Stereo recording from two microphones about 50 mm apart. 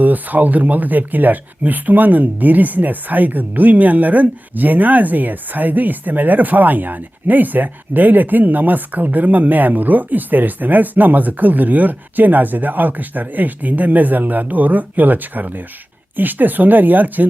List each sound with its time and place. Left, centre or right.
0.0 s speech: right